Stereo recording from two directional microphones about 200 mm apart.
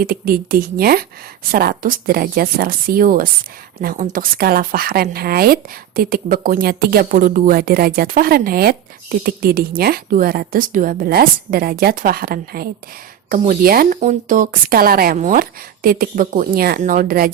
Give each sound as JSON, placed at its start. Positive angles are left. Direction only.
{"t": 0.0, "sound": "a woman's voice", "side_deg": -45}
{"t": 13.7, "sound": "a woman's voice", "side_deg": -45}